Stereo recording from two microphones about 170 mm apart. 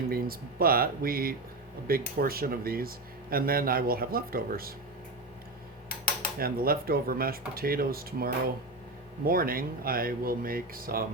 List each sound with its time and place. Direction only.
0.1 s speech: 60° right (ahead or behind)
6.4 s speech: 60° right (ahead or behind)